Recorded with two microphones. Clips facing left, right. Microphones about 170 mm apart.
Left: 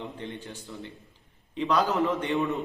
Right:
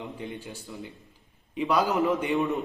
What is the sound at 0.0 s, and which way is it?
A man's voice, 10° right (ahead or behind).